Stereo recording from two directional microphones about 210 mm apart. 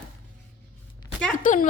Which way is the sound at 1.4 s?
40° left (ahead or behind).